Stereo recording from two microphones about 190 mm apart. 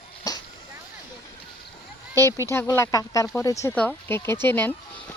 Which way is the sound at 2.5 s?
15° left (ahead or behind).